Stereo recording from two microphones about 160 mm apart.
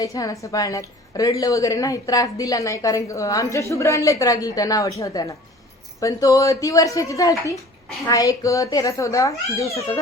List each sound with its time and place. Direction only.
0.0 s a woman's voice: 20° left (ahead or behind)